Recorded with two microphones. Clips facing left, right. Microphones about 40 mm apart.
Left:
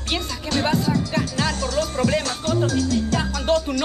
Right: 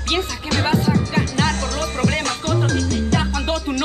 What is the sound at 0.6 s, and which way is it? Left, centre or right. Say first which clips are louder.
Music: right 3 dB; right.